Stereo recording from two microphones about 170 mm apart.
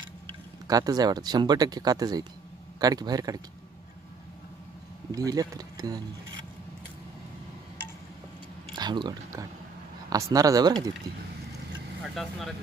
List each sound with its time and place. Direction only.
0.7 s speech: 20° right (ahead or behind)
5.1 s speech: 20° right (ahead or behind)
8.7 s speech: 25° right (ahead or behind)
12.0 s speech: centre (ahead or behind)